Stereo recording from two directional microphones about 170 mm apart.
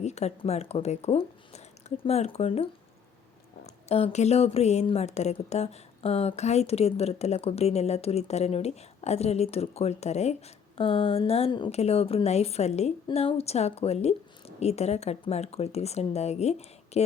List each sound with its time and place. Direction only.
0.0 s a woman's voice: 40° left (ahead or behind)
3.8 s a woman's voice: 35° left (ahead or behind)